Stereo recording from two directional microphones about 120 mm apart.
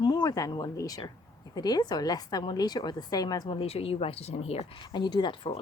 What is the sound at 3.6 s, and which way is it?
Speech, 55° left (ahead or behind).